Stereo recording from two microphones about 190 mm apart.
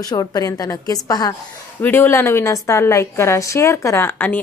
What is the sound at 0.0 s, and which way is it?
A woman's voice, 20° left (ahead or behind).